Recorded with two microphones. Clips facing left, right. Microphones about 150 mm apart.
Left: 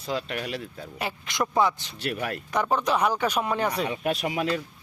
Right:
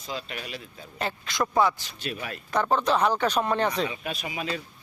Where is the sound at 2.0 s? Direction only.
65° left (ahead or behind).